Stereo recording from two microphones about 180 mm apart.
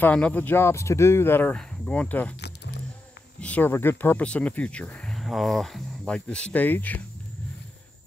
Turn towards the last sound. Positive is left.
turn(degrees=10)  # may be behind; listen again after turning